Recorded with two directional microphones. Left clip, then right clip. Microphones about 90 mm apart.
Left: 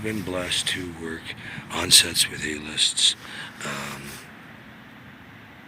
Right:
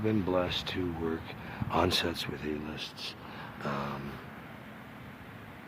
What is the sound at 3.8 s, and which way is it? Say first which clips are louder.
Speech: left 3 dB; 5° right (ahead or behind).